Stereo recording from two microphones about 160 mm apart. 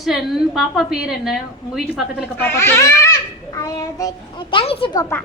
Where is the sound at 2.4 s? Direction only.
15° left (ahead or behind); by 5.0 s 30° left (ahead or behind).